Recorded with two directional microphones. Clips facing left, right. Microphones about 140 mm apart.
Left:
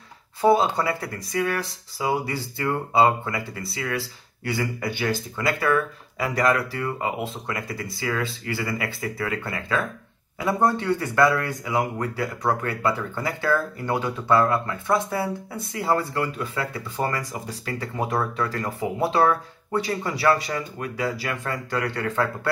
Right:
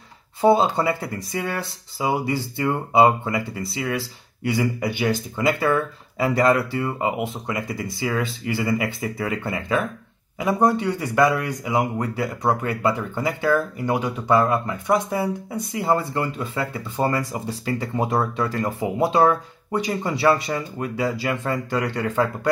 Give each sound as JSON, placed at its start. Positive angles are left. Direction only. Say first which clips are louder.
{"t": 0.4, "sound": "speech", "louder": "right 2 dB", "side_deg": -25}